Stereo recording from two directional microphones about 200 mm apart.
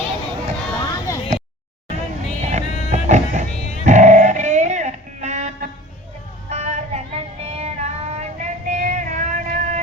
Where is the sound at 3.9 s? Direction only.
35° right (ahead or behind).